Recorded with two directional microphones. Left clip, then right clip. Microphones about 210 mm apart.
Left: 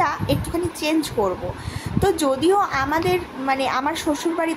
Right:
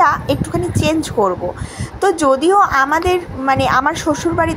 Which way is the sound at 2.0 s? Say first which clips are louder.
Right 6 dB; 20° right (ahead or behind).